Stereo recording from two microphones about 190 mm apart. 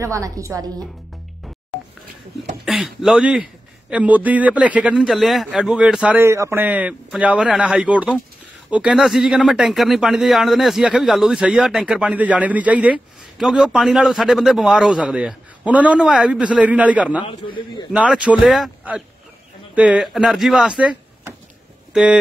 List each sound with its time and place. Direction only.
0.0 s a woman's voice: 15° right (ahead or behind)
2.6 s speech: centre (ahead or behind)
17.3 s a man's voice: 25° left (ahead or behind)
17.9 s speech: 5° right (ahead or behind)